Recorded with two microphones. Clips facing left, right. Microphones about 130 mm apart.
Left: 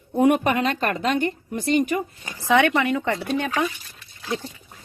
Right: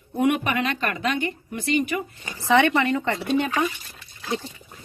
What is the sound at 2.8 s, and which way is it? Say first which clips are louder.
Speech: even; 10° left (ahead or behind).